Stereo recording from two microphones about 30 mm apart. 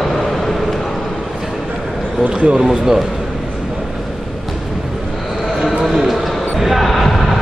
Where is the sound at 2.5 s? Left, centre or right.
Centre.